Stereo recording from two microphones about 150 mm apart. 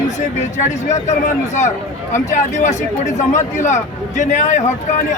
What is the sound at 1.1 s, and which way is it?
Speech, 55° left (ahead or behind).